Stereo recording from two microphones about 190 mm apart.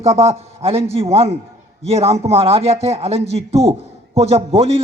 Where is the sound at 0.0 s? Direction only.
30° right (ahead or behind).